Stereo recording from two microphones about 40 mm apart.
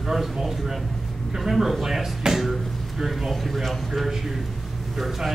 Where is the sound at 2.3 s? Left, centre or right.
Centre.